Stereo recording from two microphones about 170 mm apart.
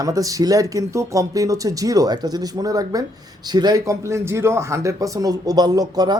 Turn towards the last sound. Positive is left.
turn(degrees=-25)  # may be behind; listen again after turning